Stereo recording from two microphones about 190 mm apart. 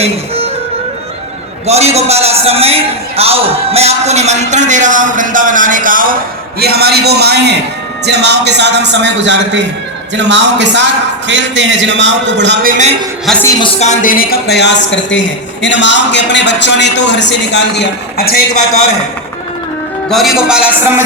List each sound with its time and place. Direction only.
0.0 s music: 30° right (ahead or behind)
1.6 s a man's voice: 35° right (ahead or behind)
6.6 s a man's voice: 55° right (ahead or behind)
12.6 s a man's voice: 40° right (ahead or behind)
13.6 s a man's voice: 35° left (ahead or behind); by 18.4 s 55° left (ahead or behind)
20.1 s a man's voice: centre (ahead or behind)